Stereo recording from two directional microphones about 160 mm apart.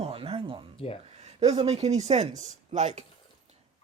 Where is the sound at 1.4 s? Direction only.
40° right (ahead or behind).